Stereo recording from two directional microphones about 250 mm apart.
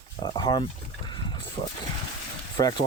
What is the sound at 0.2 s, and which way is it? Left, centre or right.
Speech, centre.